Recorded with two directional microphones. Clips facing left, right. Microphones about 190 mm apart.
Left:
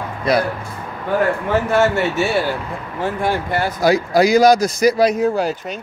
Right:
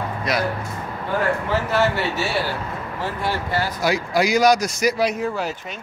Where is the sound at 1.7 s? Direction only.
50° left (ahead or behind).